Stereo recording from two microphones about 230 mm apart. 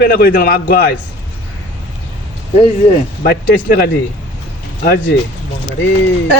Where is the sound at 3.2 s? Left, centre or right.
Left.